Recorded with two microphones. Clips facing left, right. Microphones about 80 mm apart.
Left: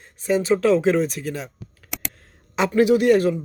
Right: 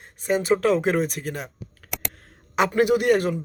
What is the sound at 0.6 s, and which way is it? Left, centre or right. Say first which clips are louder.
Speech: left 3 dB; right.